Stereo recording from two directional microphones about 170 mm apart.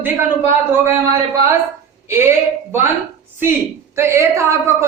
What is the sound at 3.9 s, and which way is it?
Speech, 15° right (ahead or behind).